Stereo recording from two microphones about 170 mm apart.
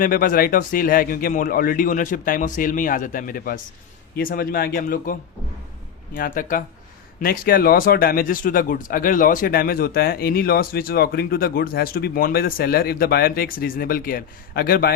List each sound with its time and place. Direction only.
0.0 s speech: 55° left (ahead or behind)
6.1 s speech: 55° left (ahead or behind)